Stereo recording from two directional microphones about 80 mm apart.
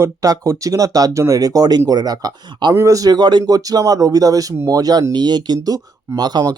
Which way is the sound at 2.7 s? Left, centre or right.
Right.